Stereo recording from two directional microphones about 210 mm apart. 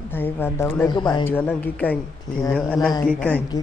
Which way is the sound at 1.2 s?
10° left (ahead or behind).